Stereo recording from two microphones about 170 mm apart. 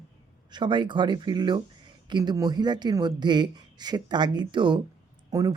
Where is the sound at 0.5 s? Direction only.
25° right (ahead or behind).